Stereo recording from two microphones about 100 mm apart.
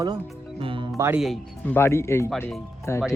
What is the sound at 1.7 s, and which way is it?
Speech, 25° left (ahead or behind).